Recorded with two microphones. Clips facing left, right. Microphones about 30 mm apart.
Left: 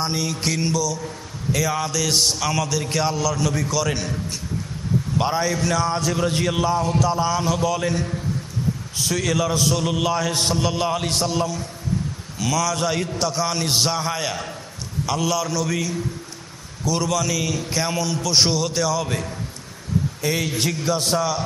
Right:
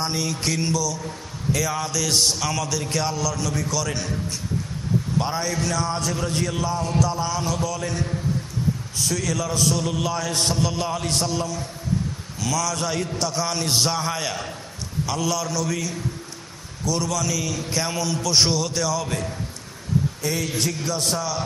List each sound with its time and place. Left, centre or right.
0.0 s a man's voice: centre
5.2 s a man's voice: centre
6.2 s a man's voice: left; by 21.4 s centre